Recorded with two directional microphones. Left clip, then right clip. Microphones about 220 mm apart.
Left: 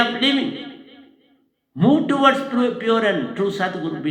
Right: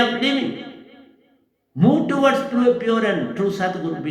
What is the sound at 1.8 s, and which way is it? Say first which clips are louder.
A man's voice: left 1 dB; 30° left (ahead or behind).